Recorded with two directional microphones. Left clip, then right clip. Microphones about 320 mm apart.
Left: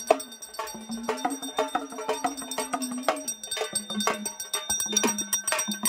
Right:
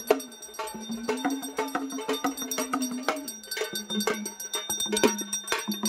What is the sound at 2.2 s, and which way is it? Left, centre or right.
Music, centre.